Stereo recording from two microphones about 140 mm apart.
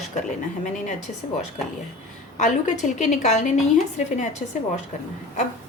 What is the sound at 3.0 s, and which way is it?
A woman's voice, 60° left (ahead or behind).